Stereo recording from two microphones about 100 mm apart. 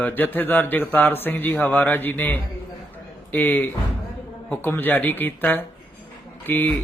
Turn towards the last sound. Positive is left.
turn(degrees=20)  # may be behind; listen again after turning